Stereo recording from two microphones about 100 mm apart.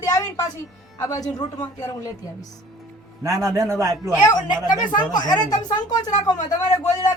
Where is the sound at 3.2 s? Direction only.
30° right (ahead or behind).